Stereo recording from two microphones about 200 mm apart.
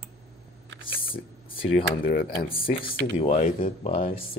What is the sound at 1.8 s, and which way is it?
Speech, 50° left (ahead or behind).